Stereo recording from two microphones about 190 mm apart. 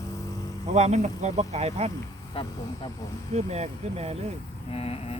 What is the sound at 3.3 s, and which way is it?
Speech, 35° right (ahead or behind).